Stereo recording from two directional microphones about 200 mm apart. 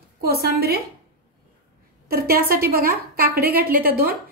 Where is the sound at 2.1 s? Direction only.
50° right (ahead or behind).